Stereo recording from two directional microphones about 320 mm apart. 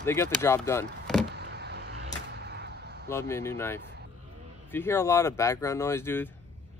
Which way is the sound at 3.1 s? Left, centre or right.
Centre.